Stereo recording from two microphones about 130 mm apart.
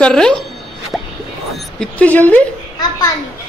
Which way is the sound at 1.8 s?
10° left (ahead or behind).